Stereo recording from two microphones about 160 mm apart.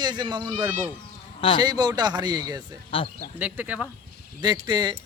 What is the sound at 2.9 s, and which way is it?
Speech, 35° left (ahead or behind).